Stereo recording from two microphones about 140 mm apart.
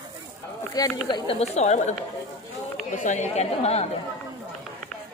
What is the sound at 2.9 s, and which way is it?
Speech, 60° left (ahead or behind).